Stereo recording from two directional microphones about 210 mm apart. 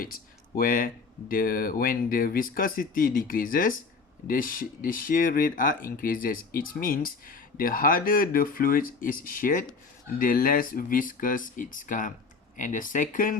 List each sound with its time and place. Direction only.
0.5 s speech: 45° left (ahead or behind)